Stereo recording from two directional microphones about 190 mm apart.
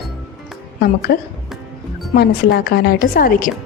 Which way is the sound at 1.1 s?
55° left (ahead or behind).